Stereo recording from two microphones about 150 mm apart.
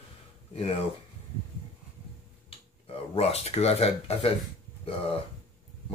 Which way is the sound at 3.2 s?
45° left (ahead or behind).